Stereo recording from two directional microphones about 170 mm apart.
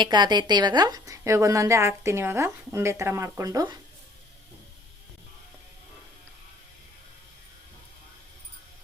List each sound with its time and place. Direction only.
0.0 s a woman's voice: 25° right (ahead or behind)